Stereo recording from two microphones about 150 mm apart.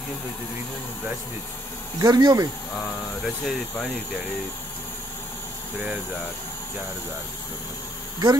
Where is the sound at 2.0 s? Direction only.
25° right (ahead or behind).